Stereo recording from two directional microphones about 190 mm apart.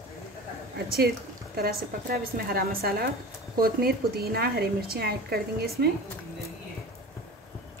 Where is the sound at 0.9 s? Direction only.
55° right (ahead or behind).